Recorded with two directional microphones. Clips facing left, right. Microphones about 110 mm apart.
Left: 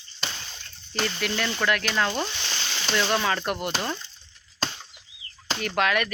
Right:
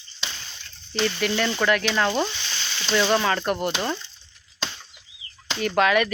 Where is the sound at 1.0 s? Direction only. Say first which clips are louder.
Right 4 dB; centre (ahead or behind).